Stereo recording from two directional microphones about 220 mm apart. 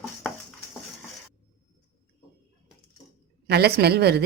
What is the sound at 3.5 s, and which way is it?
Speech, 45° right (ahead or behind).